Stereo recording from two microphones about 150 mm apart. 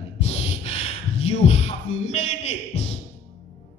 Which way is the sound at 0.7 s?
45° left (ahead or behind).